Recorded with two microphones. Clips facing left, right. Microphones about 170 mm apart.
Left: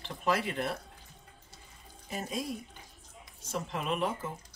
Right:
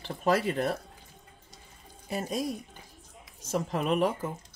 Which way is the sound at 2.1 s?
40° right (ahead or behind).